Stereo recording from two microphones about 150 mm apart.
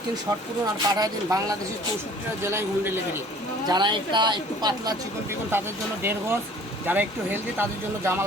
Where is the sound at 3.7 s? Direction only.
30° right (ahead or behind).